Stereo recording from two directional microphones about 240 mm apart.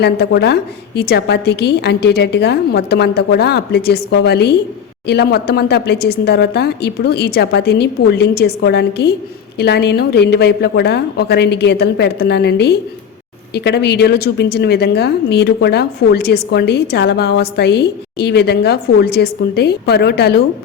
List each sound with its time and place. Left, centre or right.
0.0 s a woman's voice: left